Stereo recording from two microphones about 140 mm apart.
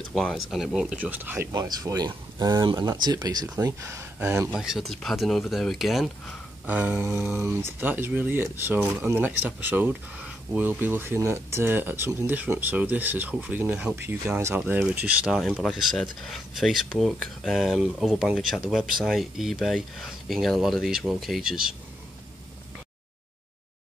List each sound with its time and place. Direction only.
0.1 s speech: 5° left (ahead or behind); by 1.5 s 15° right (ahead or behind)
1.5 s speech: 25° right (ahead or behind)
4.5 s speech: centre (ahead or behind)